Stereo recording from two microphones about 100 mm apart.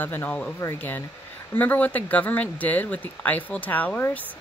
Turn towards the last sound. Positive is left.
turn(degrees=20)  # may be behind; listen again after turning